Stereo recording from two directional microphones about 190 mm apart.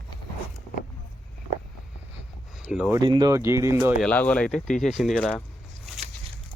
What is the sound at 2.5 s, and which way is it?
Speech, 5° right (ahead or behind).